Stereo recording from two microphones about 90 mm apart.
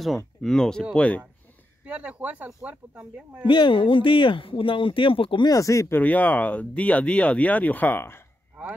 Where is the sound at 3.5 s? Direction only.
65° left (ahead or behind).